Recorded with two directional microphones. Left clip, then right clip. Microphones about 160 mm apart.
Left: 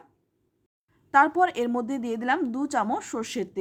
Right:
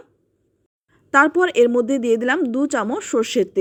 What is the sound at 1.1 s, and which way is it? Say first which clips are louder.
Speech: right 6 dB; 20° right (ahead or behind).